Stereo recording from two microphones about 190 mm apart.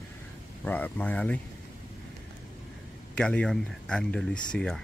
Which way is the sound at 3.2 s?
5° left (ahead or behind).